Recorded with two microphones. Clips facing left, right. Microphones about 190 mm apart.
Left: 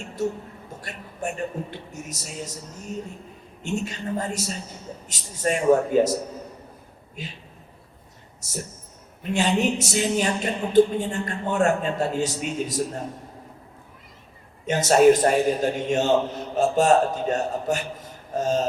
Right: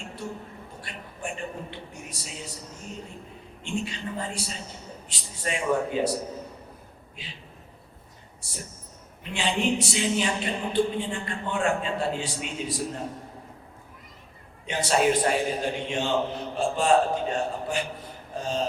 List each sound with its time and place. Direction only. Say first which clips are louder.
0.8 s a woman's voice: left 5 dB; 45° left (ahead or behind)
7.2 s a woman's voice: left 8 dB; 45° left (ahead or behind)
8.4 s a woman's voice: left 7 dB; 45° left (ahead or behind)
14.7 s a woman's voice: left 7 dB; 45° left (ahead or behind)